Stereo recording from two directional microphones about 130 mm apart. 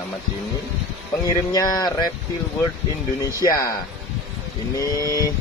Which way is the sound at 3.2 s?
30° left (ahead or behind).